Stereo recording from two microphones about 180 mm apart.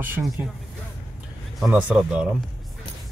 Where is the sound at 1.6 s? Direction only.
10° right (ahead or behind).